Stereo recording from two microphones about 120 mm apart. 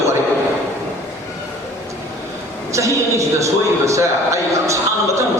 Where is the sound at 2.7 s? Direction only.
25° right (ahead or behind).